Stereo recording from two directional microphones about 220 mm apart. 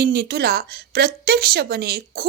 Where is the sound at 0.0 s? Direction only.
45° right (ahead or behind).